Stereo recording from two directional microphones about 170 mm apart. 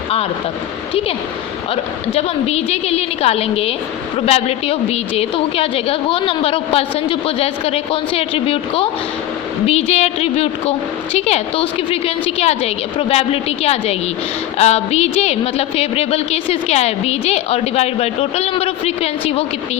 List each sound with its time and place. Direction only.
1.7 s a woman's voice: 35° left (ahead or behind)